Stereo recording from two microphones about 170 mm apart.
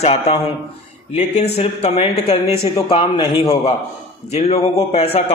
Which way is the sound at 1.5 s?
35° left (ahead or behind).